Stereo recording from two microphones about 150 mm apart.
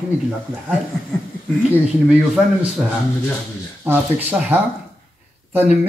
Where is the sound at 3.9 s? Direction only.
10° right (ahead or behind).